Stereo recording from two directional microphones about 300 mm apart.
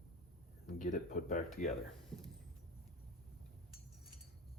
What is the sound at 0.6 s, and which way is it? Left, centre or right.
Speech, left.